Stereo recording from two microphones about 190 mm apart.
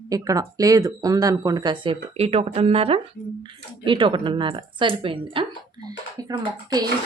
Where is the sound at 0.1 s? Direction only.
20° right (ahead or behind).